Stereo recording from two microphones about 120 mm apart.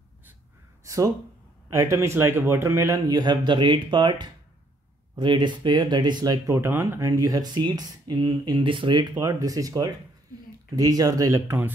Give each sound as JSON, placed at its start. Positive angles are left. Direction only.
{"t": 0.8, "sound": "a man's voice", "side_deg": -25}
{"t": 6.4, "sound": "speech", "side_deg": -20}
{"t": 9.2, "sound": "a man's voice", "side_deg": -30}